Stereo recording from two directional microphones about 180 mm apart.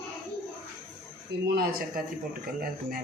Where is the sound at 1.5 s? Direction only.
60° right (ahead or behind).